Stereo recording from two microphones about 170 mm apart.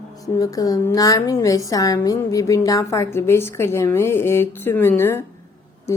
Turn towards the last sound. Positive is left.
turn(degrees=15)  # may be behind; listen again after turning